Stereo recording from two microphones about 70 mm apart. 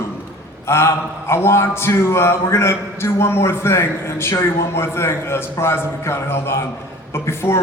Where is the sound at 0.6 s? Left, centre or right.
Left.